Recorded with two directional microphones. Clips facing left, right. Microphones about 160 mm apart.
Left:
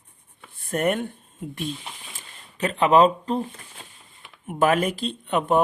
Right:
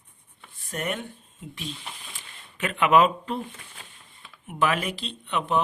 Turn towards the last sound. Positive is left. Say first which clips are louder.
# left 5 dB
turn(degrees=45)  # may be behind; listen again after turning